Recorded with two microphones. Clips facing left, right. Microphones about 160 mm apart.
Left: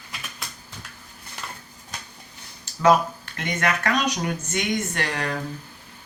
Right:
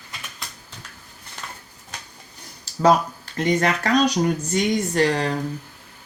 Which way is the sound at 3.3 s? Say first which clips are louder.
Right 5 dB; 35° right (ahead or behind).